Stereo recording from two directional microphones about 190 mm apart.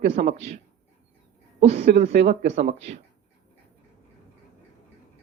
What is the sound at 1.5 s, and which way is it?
A woman's voice, 35° right (ahead or behind).